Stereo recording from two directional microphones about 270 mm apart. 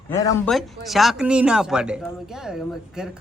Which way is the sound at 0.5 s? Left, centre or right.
Centre.